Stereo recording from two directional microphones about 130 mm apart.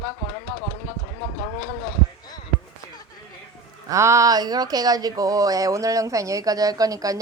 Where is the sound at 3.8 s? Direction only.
25° right (ahead or behind).